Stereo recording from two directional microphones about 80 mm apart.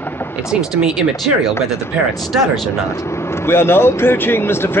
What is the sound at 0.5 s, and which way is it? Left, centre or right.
Speech, centre.